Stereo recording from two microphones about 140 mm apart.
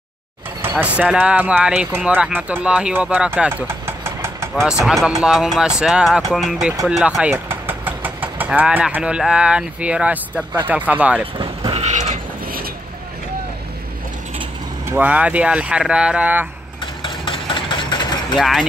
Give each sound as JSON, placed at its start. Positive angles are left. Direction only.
{"t": 0.6, "sound": "speech", "side_deg": -15}
{"t": 4.6, "sound": "speech", "side_deg": -5}
{"t": 11.3, "sound": "vehicle", "side_deg": -40}
{"t": 11.9, "sound": "a sound", "side_deg": -60}
{"t": 14.9, "sound": "speech", "side_deg": -10}
{"t": 16.8, "sound": "engine", "side_deg": 35}
{"t": 18.4, "sound": "speech", "side_deg": 0}